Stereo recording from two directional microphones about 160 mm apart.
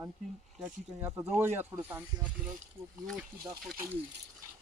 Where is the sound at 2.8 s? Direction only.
Centre (ahead or behind).